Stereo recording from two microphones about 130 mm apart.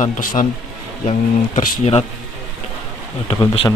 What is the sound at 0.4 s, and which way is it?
Speech, 80° left.